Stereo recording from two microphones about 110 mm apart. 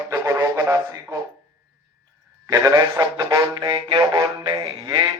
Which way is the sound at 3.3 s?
35° right (ahead or behind).